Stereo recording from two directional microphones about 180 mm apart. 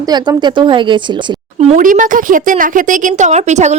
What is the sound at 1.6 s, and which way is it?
A woman's voice, 40° right (ahead or behind).